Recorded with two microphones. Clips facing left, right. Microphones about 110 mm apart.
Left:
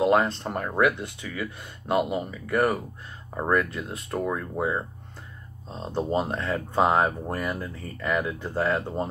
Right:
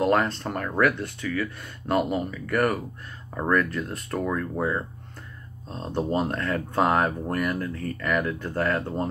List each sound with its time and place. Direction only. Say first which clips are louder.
0.0 s speech: left 1 dB; 15° left (ahead or behind)